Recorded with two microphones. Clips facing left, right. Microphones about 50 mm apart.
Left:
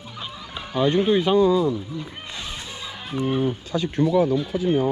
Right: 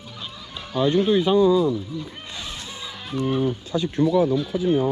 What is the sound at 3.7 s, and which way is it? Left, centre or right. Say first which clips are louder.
Speech: right 1 dB; left.